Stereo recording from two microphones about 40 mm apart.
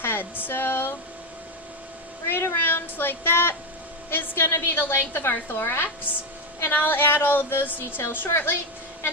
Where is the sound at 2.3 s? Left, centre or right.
Left.